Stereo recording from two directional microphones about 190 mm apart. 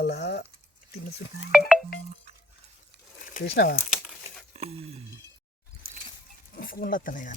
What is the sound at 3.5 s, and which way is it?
Speech, 55° left (ahead or behind).